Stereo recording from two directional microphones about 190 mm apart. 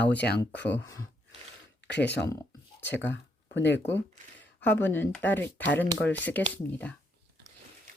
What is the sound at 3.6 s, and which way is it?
Speech, 70° left (ahead or behind).